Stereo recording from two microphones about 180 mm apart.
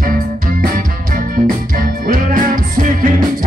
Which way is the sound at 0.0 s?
50° right (ahead or behind).